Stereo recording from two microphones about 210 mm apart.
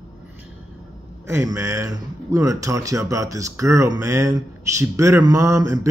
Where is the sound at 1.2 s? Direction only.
15° right (ahead or behind).